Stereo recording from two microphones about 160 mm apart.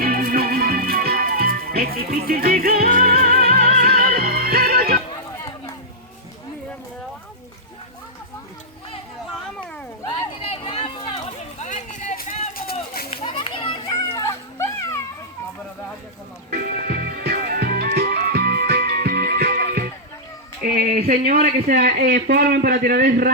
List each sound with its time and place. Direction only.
0.0 s music: 65° right (ahead or behind)
3.7 s music: 60° right (ahead or behind)
10.1 s a sound: 30° left (ahead or behind)
11.3 s run: 50° left (ahead or behind)
13.1 s children playing: 35° left (ahead or behind)
13.8 s a sound: 20° left (ahead or behind)
16.5 s music: 70° right (ahead or behind)
20.6 s a sound: 65° right (ahead or behind)
21.1 s a man's voice: 75° right (ahead or behind)